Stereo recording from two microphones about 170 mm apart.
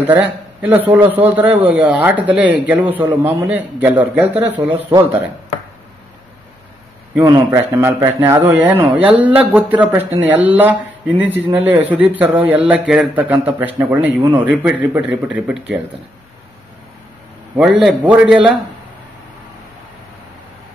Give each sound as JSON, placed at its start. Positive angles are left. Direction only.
{"t": 0.0, "sound": "a man's voice", "side_deg": -10}
{"t": 7.2, "sound": "a man's voice", "side_deg": -20}
{"t": 17.6, "sound": "a man's voice", "side_deg": -5}